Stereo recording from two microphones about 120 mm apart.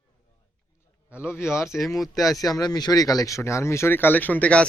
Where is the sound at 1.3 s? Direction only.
20° left (ahead or behind).